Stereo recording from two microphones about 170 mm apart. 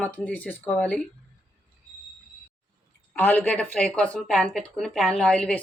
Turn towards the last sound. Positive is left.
turn(degrees=10)  # may be behind; listen again after turning